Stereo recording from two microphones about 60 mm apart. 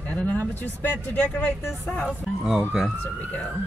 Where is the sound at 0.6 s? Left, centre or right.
Left.